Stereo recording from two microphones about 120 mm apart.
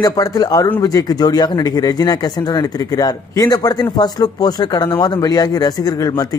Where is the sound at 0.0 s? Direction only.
30° left (ahead or behind).